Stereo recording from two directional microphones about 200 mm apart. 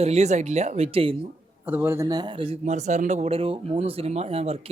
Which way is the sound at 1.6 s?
10° right (ahead or behind).